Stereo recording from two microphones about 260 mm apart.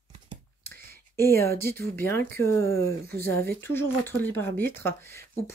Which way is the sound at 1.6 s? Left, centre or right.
Centre.